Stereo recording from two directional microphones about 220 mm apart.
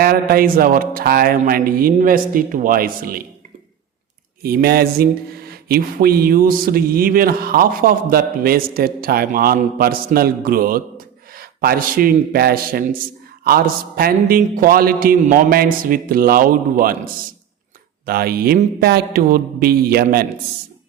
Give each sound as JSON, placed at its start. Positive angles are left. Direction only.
{"t": 0.0, "sound": "speech", "side_deg": -40}
{"t": 4.4, "sound": "speech", "side_deg": -45}
{"t": 18.0, "sound": "speech", "side_deg": -45}